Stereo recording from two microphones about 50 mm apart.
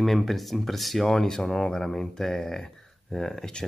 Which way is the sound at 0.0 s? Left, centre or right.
Centre.